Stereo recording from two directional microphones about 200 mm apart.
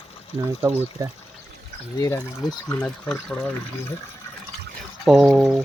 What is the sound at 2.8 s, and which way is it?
Speech, 5° left (ahead or behind).